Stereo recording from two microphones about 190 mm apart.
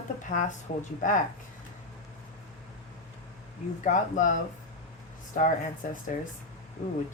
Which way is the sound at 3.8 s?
40° left (ahead or behind).